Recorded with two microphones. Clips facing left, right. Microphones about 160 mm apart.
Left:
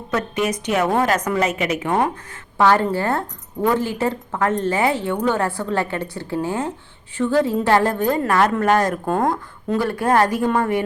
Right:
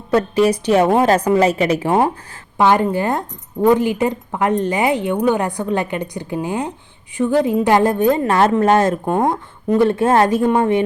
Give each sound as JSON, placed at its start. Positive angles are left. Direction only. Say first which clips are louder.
{"t": 0.1, "sound": "a woman's voice", "louder": "right 7 dB", "side_deg": -30}
{"t": 2.6, "sound": "a woman's voice", "louder": "right 2 dB", "side_deg": -15}